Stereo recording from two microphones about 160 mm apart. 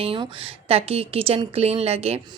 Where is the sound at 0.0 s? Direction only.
35° right (ahead or behind).